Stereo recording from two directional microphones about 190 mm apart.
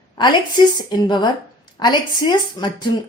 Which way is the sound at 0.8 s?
20° left (ahead or behind).